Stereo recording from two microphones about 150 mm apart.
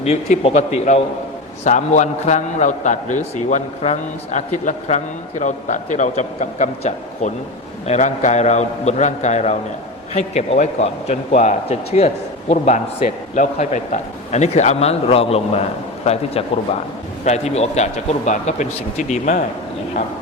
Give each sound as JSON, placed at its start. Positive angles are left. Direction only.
{"t": 0.0, "sound": "a man's voice", "side_deg": 45}
{"t": 17.2, "sound": "a man's voice", "side_deg": 45}